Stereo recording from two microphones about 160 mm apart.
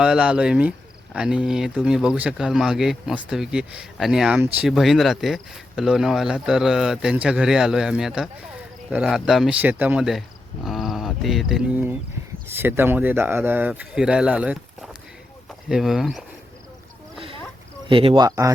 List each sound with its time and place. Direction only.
0.0 s speech: 5° right (ahead or behind)
12.5 s speech: 15° right (ahead or behind)
17.8 s speech: 35° right (ahead or behind)
18.3 s speech: 20° right (ahead or behind)